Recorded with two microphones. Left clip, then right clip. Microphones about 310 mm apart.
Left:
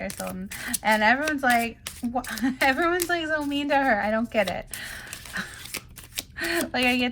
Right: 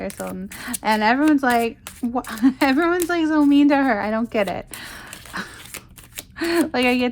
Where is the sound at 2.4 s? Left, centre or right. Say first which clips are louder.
Right 4 dB; centre.